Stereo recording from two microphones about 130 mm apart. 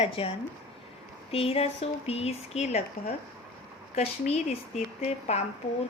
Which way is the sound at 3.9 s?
55° left (ahead or behind).